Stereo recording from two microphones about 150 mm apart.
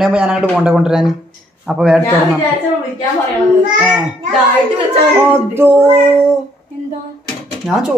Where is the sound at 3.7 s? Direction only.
5° right (ahead or behind).